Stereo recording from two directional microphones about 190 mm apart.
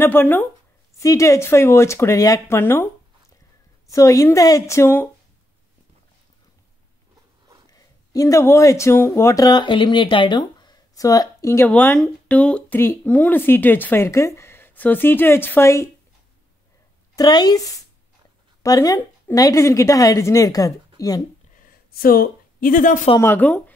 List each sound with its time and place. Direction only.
0.0 s speech: 10° left (ahead or behind)
3.9 s speech: 15° left (ahead or behind)
7.7 s speech: 20° left (ahead or behind)
17.1 s speech: 20° left (ahead or behind)
21.6 s a sound: 50° left (ahead or behind)
23.2 s speech: 10° left (ahead or behind)